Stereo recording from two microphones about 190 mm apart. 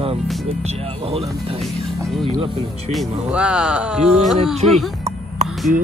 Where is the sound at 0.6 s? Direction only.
30° right (ahead or behind).